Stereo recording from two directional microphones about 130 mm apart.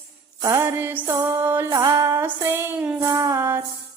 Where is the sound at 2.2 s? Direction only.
15° right (ahead or behind).